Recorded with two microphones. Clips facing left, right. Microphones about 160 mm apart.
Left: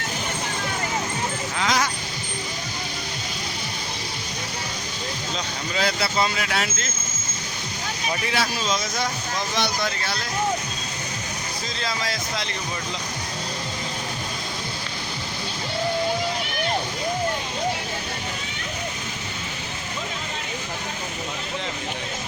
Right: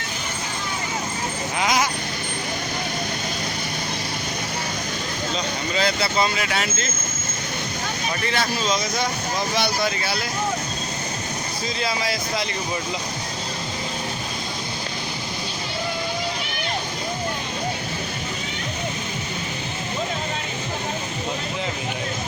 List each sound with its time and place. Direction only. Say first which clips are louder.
1.5 s a sound: right 2 dB; 10° right (ahead or behind)
5.7 s speech: right 1 dB; centre (ahead or behind)
8.3 s speech: right 2 dB; 5° left (ahead or behind)
11.8 s speech: right 3 dB; 5° right (ahead or behind)